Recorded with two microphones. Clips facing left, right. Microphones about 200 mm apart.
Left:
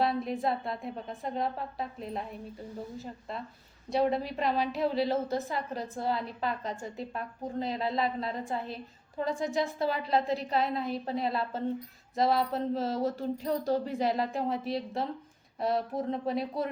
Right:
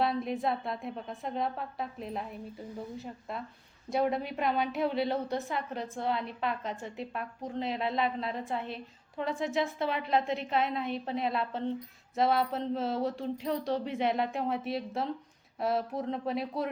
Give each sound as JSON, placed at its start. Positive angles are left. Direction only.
{"t": 0.0, "sound": "a woman's voice", "side_deg": 0}
{"t": 10.2, "sound": "a woman's voice", "side_deg": 35}
{"t": 10.5, "sound": "a woman's voice", "side_deg": 0}